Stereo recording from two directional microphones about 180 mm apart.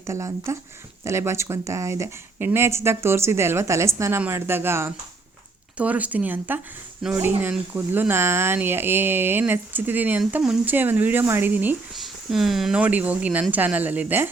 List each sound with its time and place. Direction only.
0.0 s speech: 15° right (ahead or behind)